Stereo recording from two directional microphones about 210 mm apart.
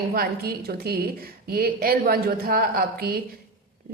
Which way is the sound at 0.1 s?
45° right (ahead or behind).